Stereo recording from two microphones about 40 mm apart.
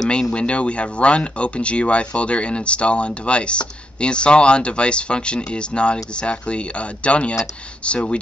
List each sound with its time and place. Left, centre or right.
0.3 s speech: left